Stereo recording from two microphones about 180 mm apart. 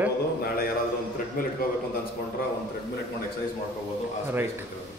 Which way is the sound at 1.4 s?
55° left (ahead or behind).